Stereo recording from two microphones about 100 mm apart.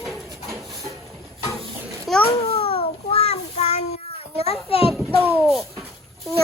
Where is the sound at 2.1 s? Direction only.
Centre (ahead or behind).